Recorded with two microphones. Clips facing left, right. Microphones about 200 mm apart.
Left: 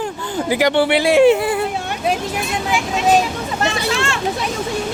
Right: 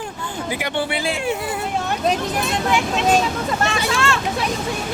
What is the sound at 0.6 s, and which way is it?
Speech, 85° left.